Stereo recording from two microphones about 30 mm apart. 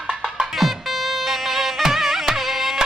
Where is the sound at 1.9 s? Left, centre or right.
Centre.